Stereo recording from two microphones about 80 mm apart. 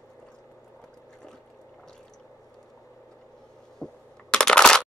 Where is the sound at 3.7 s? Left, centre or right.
Centre.